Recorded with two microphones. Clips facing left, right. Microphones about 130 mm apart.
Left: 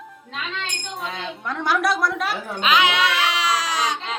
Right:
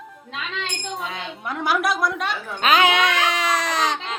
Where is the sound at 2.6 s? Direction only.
50° right (ahead or behind).